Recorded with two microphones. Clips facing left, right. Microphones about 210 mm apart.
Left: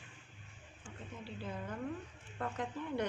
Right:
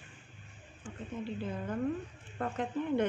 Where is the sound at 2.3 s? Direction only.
50° right (ahead or behind).